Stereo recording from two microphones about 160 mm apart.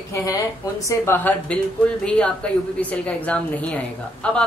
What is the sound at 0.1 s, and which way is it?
A woman's voice, 20° left (ahead or behind).